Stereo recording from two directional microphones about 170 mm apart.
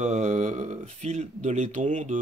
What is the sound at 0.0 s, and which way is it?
Speech, 45° right (ahead or behind).